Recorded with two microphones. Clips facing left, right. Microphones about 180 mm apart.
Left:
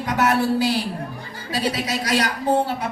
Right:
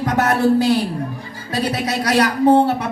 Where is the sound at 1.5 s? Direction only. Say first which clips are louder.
Right 3 dB; 60° right (ahead or behind).